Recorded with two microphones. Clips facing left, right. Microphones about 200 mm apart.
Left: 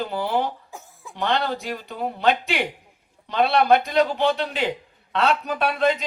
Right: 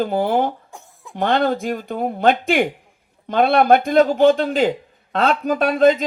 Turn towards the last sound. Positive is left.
turn(degrees=-45)  # may be behind; listen again after turning